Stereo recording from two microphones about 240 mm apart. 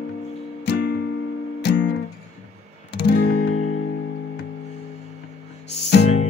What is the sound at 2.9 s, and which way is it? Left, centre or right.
Guitar, left.